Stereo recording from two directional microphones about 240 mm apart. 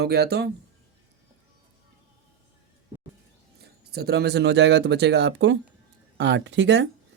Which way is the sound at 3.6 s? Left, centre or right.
Right.